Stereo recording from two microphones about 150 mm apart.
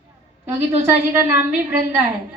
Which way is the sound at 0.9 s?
15° right (ahead or behind).